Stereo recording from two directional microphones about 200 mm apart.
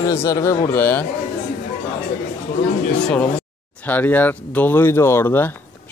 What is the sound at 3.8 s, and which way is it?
Speech, 10° left (ahead or behind).